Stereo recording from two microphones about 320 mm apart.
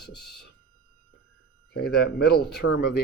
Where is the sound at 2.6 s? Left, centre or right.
Left.